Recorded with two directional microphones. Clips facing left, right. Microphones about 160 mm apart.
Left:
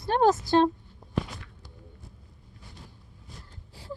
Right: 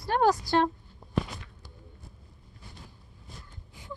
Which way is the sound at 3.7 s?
35° left (ahead or behind).